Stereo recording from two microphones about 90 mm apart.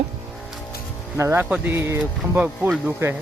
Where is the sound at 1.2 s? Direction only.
30° right (ahead or behind).